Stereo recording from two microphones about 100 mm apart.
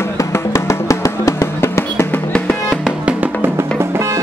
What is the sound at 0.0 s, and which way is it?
Music, 30° left (ahead or behind).